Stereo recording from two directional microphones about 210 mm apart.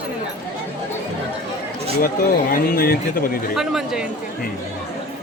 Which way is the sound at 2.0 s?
45° left (ahead or behind).